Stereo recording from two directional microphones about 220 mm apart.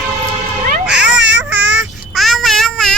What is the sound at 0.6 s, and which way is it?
Baby cry, 50° right (ahead or behind).